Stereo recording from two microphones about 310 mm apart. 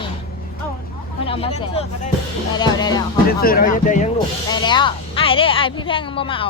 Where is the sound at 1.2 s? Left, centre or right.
Centre.